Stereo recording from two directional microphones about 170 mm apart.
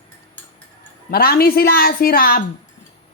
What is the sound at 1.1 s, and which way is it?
A woman's voice, 65° left (ahead or behind).